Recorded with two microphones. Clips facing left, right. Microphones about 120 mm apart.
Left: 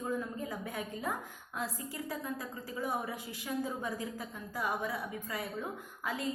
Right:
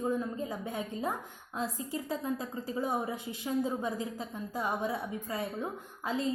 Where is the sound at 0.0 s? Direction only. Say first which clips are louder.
Right 4 dB; 25° right (ahead or behind).